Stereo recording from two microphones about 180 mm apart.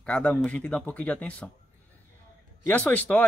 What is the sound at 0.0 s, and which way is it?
Speech, 5° left (ahead or behind).